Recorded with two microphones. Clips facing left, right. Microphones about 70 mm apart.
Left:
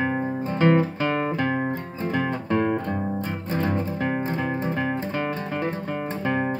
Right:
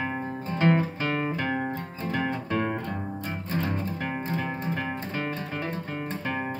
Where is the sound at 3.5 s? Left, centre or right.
Left.